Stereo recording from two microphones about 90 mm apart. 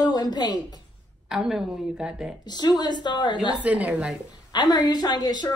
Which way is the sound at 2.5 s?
50° left (ahead or behind).